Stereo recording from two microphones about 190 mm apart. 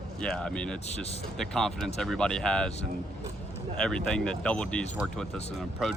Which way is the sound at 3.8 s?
5° left (ahead or behind).